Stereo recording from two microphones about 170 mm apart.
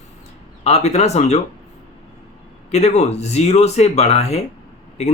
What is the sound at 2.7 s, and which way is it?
Speech, 40° left (ahead or behind).